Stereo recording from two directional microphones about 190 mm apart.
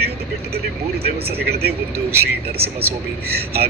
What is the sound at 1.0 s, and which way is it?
Speech, 55° right (ahead or behind).